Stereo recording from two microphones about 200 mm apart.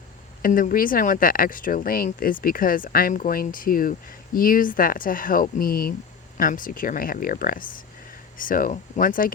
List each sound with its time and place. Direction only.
0.4 s speech: 45° left (ahead or behind)